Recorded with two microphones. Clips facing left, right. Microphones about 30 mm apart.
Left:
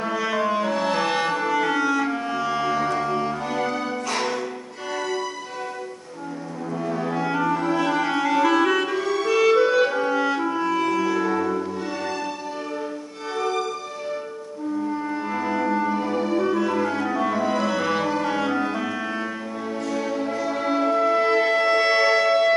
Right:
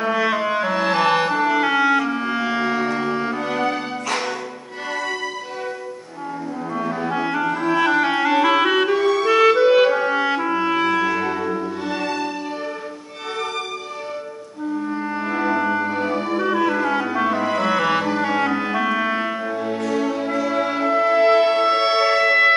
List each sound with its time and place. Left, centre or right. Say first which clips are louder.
0.0 s music: right 4 dB; right
6.7 s clarinet: right 2 dB; right
11.1 s music: even; right
15.2 s music: right 5 dB; right
16.5 s music: right 3 dB; right
20.3 s music: right 2 dB; right